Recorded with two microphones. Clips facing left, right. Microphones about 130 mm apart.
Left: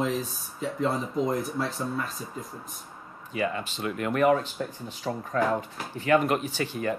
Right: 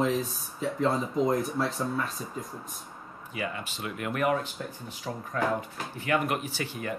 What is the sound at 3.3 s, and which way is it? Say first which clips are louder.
Speech: left 5 dB; 35° left (ahead or behind).